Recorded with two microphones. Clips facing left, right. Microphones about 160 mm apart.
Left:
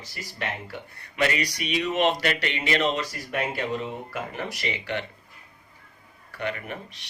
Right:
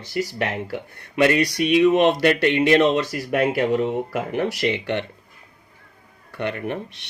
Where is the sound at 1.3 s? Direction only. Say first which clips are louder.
Right 10 dB; 55° right (ahead or behind).